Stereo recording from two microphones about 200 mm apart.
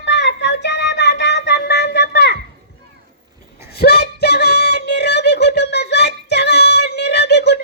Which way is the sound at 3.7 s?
55° left (ahead or behind).